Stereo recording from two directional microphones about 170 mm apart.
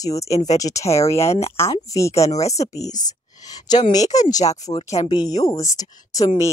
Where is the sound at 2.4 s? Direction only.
40° left (ahead or behind).